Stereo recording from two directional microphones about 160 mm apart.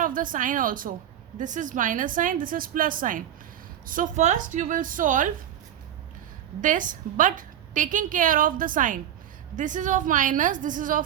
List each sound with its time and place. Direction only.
0.0 s a woman's voice: 60° right (ahead or behind)
6.6 s a woman's voice: 55° right (ahead or behind)